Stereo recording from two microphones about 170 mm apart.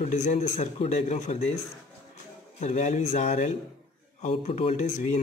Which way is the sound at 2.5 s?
40° left (ahead or behind).